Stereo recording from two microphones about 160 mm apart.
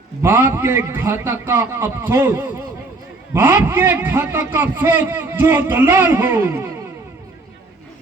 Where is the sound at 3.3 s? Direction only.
15° right (ahead or behind).